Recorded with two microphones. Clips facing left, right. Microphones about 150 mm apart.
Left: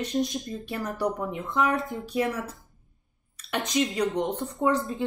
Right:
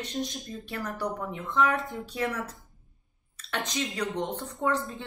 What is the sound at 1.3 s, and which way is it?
Speech, 10° left (ahead or behind).